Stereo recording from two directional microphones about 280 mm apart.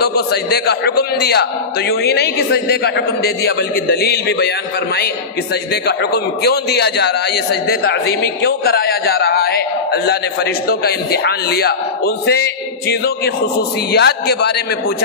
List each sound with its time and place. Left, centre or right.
0.0 s a man's voice: left
5.7 s a man's voice: left